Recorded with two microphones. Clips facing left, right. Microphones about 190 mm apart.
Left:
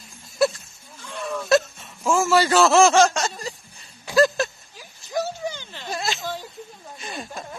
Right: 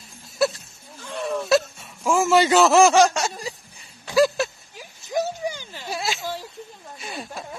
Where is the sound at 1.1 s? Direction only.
5° right (ahead or behind).